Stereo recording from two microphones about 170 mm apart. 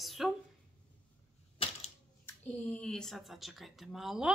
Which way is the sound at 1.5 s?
35° left (ahead or behind).